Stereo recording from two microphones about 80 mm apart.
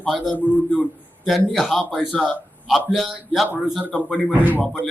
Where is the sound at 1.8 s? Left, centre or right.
Centre.